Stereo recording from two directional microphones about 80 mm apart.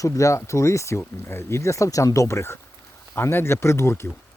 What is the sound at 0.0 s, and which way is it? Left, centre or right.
Speech, left.